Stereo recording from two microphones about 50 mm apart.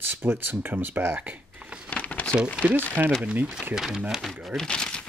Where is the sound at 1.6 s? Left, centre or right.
Centre.